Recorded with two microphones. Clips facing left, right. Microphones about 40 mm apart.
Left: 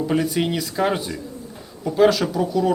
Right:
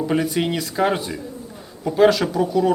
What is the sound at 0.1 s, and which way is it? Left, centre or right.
Speech, centre.